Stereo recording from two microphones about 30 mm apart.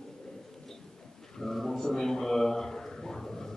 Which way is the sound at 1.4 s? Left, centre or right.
Centre.